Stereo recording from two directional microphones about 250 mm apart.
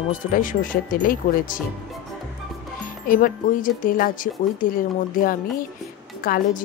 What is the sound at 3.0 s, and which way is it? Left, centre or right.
Speech, left.